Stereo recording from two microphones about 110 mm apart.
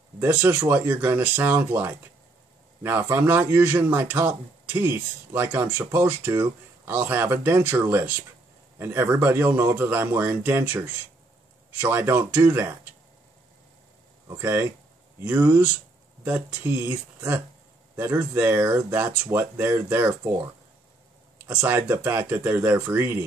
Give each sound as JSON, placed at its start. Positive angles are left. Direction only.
{"t": 0.2, "sound": "a man's voice", "side_deg": -15}
{"t": 14.2, "sound": "a man's voice", "side_deg": -20}
{"t": 21.5, "sound": "a man's voice", "side_deg": -15}